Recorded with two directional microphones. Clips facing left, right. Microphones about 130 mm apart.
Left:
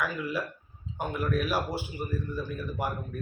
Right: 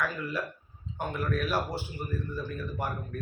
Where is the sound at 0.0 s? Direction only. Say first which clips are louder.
Left 1 dB; 5° left (ahead or behind).